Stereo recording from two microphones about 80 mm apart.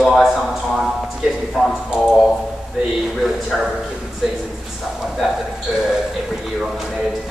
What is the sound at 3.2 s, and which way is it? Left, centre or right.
Speech, centre.